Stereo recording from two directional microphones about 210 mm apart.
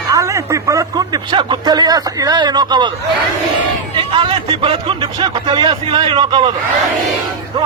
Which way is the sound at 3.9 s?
25° right (ahead or behind).